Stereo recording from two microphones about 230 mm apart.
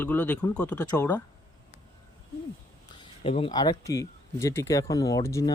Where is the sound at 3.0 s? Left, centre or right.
Left.